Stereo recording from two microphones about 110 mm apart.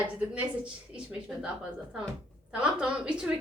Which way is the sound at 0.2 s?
10° right (ahead or behind).